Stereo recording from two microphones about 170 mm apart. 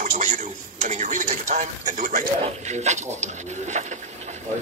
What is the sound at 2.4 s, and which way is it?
Speech, 40° right (ahead or behind).